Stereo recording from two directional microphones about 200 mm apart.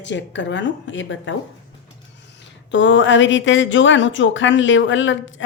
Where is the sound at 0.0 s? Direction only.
65° left (ahead or behind).